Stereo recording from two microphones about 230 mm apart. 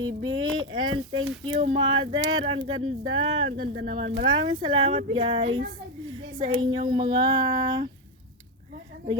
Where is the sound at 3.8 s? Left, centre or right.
Right.